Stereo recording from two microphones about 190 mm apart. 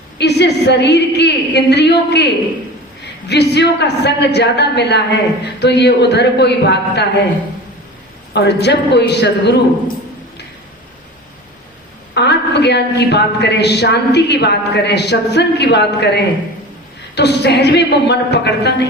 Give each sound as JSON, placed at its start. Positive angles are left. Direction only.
{"t": 0.2, "sound": "a woman's voice", "side_deg": 60}
{"t": 8.3, "sound": "a woman's voice", "side_deg": 60}
{"t": 12.1, "sound": "a woman's voice", "side_deg": 60}